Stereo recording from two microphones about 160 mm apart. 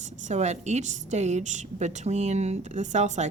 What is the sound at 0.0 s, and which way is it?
A woman's voice, 45° right (ahead or behind).